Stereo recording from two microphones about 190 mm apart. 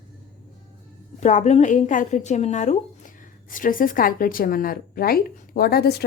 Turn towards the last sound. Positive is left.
turn(degrees=55)  # may be behind; listen again after turning